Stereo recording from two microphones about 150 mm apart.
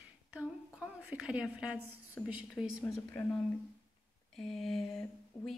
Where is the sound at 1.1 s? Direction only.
5° right (ahead or behind).